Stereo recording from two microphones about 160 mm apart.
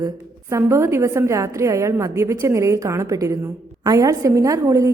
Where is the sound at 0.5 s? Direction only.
15° right (ahead or behind).